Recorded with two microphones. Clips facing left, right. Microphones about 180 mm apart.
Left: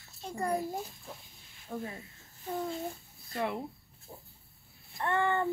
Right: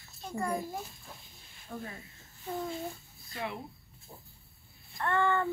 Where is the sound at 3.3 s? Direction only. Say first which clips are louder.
Left 5 dB; 50° left (ahead or behind).